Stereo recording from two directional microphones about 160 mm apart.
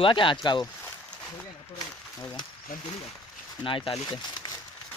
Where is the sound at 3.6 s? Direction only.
35° left (ahead or behind).